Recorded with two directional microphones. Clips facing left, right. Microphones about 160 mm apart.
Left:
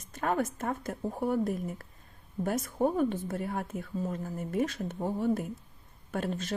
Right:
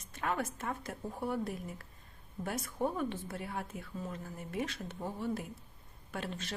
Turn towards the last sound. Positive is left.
turn(degrees=45)  # may be behind; listen again after turning